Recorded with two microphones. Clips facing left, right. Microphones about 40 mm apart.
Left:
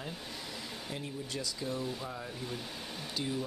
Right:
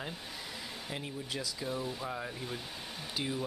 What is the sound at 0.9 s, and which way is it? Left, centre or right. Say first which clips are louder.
Speech: right 1 dB; centre.